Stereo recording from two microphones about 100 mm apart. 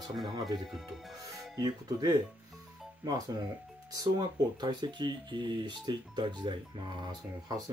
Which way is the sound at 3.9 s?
45° right (ahead or behind).